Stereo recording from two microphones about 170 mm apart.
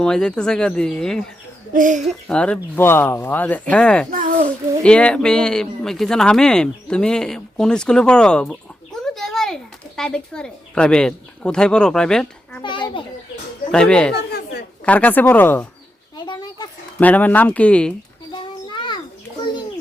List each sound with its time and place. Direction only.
0.0 s speech: 5° left (ahead or behind)
1.7 s speech: 50° right (ahead or behind)
2.0 s speech: 5° left (ahead or behind)
4.1 s a child's voice: 50° right (ahead or behind)
4.8 s speech: 5° left (ahead or behind)
12.6 s a child's voice: 30° left (ahead or behind)
13.7 s speech: 5° left (ahead or behind)
14.1 s chatter: 70° left (ahead or behind)
14.8 s speech: 10° left (ahead or behind)
16.1 s a sound: 25° left (ahead or behind)
17.0 s speech: 10° left (ahead or behind)
18.3 s a sound: 25° left (ahead or behind)